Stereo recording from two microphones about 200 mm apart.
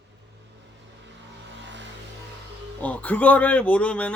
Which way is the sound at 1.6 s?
60° right (ahead or behind).